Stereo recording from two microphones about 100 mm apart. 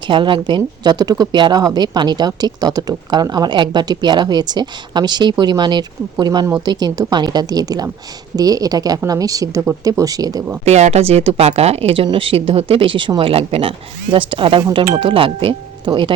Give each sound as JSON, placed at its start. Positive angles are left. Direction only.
{"t": 0.1, "sound": "a woman's voice", "side_deg": -55}
{"t": 10.7, "sound": "speech", "side_deg": -90}
{"t": 12.0, "sound": "speech", "side_deg": -60}